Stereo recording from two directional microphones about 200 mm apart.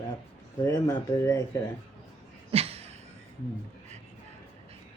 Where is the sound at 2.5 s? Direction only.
30° right (ahead or behind).